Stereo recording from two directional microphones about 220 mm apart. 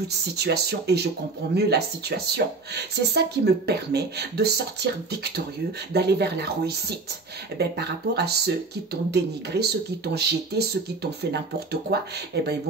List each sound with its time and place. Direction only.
0.4 s speech: 50° right (ahead or behind)